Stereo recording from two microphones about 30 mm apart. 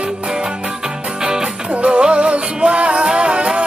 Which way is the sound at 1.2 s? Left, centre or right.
Right.